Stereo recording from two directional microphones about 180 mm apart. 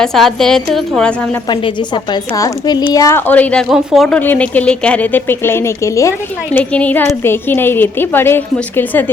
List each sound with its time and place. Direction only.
0.0 s a woman's voice: centre (ahead or behind)
2.3 s speech: 20° left (ahead or behind)